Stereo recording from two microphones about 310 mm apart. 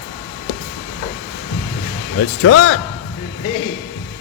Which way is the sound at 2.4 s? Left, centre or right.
Left.